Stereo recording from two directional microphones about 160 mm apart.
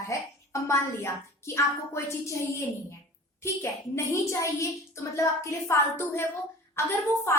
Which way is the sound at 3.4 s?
15° left (ahead or behind).